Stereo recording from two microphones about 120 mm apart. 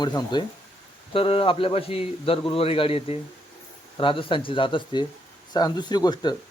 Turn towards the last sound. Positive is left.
turn(degrees=35)  # may be behind; listen again after turning